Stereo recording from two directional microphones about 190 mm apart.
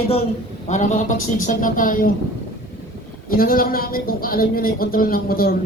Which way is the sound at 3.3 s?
50° left (ahead or behind).